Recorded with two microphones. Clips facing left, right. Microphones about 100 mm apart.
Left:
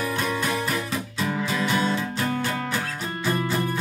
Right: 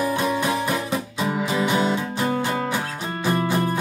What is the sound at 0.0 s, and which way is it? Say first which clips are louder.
Music: right 4 dB; 25° right (ahead or behind).